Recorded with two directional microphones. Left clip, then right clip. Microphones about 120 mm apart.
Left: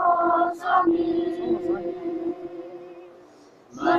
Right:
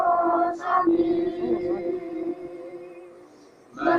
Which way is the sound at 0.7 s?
55° right (ahead or behind).